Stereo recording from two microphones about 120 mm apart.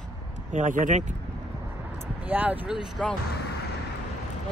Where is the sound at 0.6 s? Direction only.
90° right.